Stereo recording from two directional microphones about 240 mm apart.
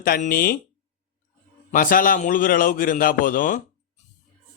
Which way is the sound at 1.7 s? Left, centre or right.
Left.